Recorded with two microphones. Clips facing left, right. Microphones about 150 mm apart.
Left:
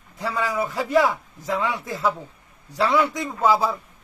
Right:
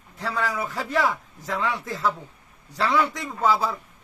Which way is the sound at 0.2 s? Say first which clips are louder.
Left 3 dB; 10° left (ahead or behind).